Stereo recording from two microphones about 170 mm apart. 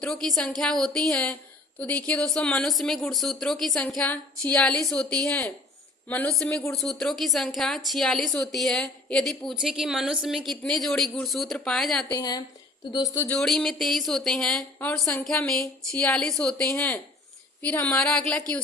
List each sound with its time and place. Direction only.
0.0 s a woman's voice: 5° left (ahead or behind)
12.1 s speech: 25° left (ahead or behind)
13.2 s a woman's voice: 5° left (ahead or behind)